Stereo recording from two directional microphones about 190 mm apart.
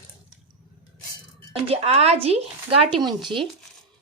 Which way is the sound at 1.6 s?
30° right (ahead or behind).